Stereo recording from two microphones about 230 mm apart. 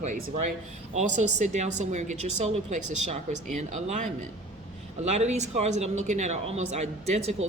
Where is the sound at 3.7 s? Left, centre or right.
Right.